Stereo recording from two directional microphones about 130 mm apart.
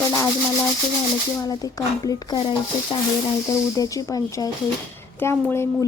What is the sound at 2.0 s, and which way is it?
Speech, 30° left (ahead or behind).